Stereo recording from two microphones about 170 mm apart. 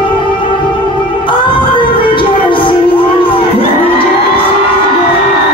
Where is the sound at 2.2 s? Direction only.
30° left (ahead or behind).